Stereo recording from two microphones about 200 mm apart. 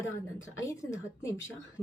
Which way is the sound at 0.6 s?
15° left (ahead or behind).